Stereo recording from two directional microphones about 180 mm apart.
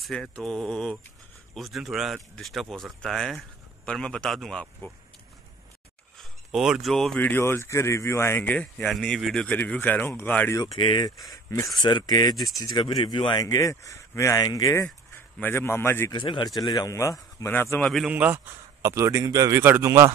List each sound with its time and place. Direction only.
0.0 s speech: centre (ahead or behind)
6.1 s speech: centre (ahead or behind)
10.6 s speech: 25° left (ahead or behind)
16.2 s speech: 25° left (ahead or behind); by 20.1 s 15° right (ahead or behind)